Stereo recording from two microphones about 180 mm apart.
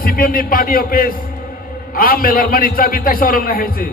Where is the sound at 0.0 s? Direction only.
55° left (ahead or behind).